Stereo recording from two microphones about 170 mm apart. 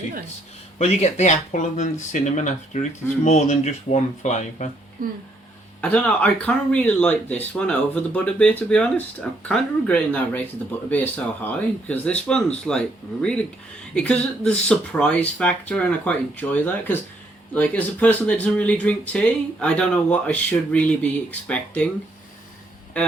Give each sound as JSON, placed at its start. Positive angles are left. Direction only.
{"t": 0.8, "sound": "speech", "side_deg": 40}
{"t": 5.8, "sound": "speech", "side_deg": 10}
{"t": 13.9, "sound": "speech", "side_deg": 5}